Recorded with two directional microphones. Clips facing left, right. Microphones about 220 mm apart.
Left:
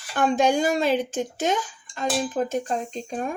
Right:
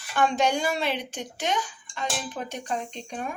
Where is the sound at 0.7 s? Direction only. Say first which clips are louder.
Left 7 dB; 45° left (ahead or behind).